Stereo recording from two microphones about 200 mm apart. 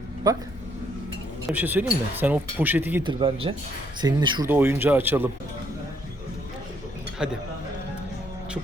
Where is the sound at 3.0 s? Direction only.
25° right (ahead or behind).